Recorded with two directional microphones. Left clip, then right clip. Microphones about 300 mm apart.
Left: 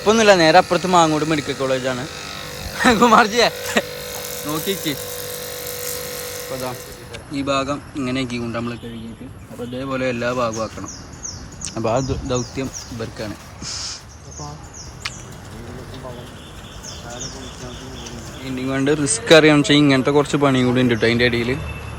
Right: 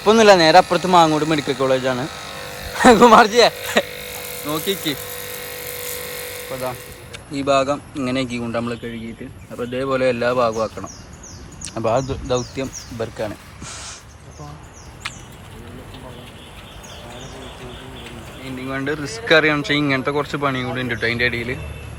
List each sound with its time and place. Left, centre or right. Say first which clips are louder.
0.0 s speech: right 2 dB; centre
2.0 s electric shaver: even; centre
2.7 s speech: right 3 dB; centre
6.5 s electric shaver: right 3 dB; centre
7.3 s speech: right 4 dB; centre
18.4 s speech: left 5 dB; centre